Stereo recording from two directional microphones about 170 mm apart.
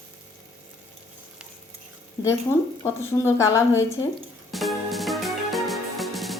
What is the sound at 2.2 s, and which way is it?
A woman's voice, 15° left (ahead or behind).